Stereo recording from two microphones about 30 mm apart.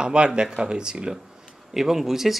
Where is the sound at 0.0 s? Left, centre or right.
Right.